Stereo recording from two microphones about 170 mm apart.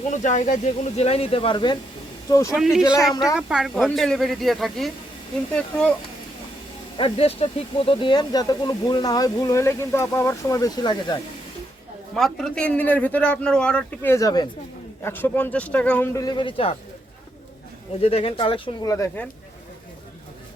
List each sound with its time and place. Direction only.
0.1 s speech: 45° left (ahead or behind); by 2.4 s 20° left (ahead or behind)
3.0 s a man's voice: centre (ahead or behind)
6.9 s speech: 35° left (ahead or behind)
12.1 s a man's voice: centre (ahead or behind)
16.1 s speech: 25° left (ahead or behind)
18.0 s speech: 35° left (ahead or behind)
18.9 s a man's voice: 20° left (ahead or behind)